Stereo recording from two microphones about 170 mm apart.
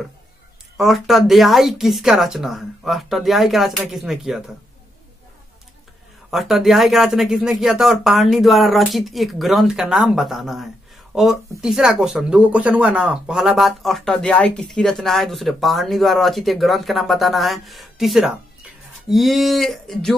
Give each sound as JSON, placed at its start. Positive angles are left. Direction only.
{"t": 0.7, "sound": "speech", "side_deg": 0}
{"t": 6.3, "sound": "speech", "side_deg": 0}